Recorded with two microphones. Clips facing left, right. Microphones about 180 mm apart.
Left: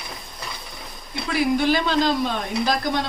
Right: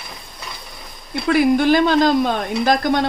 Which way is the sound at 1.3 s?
50° right (ahead or behind).